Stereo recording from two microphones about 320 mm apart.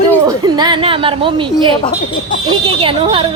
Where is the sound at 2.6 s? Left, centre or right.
Centre.